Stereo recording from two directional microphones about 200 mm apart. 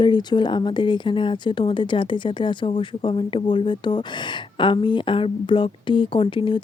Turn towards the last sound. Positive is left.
turn(degrees=25)  # may be behind; listen again after turning